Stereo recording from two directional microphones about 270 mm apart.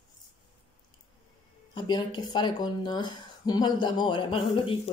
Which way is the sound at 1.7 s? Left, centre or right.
Centre.